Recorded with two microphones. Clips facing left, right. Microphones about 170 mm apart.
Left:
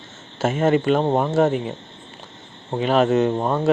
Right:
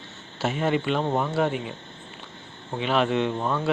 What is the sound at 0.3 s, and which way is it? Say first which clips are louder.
Speech: left 6 dB; 50° left (ahead or behind).